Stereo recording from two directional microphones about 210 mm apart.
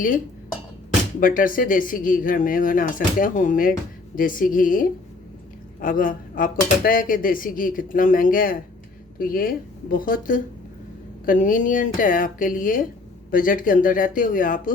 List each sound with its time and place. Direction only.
1.2 s speech: 40° left (ahead or behind)